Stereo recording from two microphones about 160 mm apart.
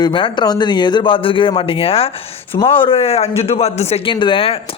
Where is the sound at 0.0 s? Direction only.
30° left (ahead or behind).